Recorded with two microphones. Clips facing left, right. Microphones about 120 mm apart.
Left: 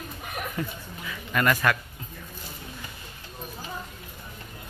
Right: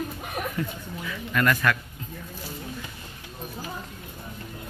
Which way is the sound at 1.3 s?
15° left (ahead or behind).